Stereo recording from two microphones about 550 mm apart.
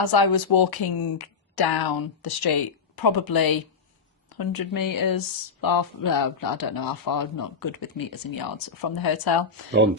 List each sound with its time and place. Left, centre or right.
0.0 s speech: left